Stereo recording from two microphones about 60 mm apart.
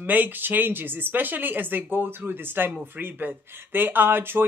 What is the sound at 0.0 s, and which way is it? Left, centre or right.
Speech, right.